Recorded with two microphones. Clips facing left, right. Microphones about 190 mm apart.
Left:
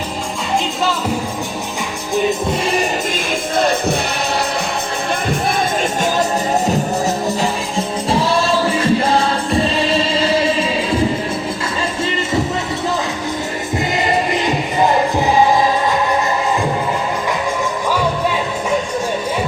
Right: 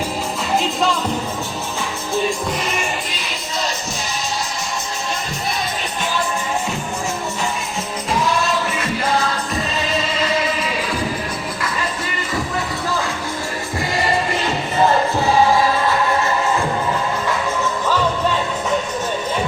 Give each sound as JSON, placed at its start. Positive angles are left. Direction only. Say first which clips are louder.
{"t": 3.5, "sound": "music", "louder": "left 10 dB", "side_deg": 55}
{"t": 6.0, "sound": "music", "louder": "left 3 dB", "side_deg": 40}
{"t": 7.8, "sound": "music", "louder": "left 5 dB", "side_deg": 30}
{"t": 13.9, "sound": "music", "louder": "left 2 dB", "side_deg": 20}